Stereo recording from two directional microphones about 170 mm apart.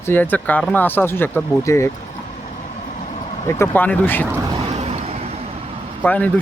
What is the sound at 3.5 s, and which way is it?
Speech, 15° left (ahead or behind).